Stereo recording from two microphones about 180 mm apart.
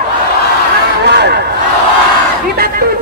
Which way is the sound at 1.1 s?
65° right (ahead or behind).